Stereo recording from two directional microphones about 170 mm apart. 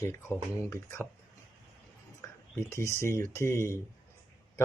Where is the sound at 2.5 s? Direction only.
15° left (ahead or behind).